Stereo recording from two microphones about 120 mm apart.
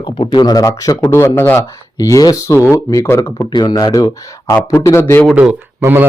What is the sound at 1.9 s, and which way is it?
Speech, 30° left (ahead or behind).